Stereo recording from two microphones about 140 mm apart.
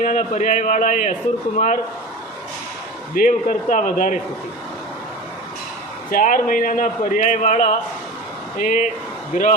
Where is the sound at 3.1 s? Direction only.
80° left.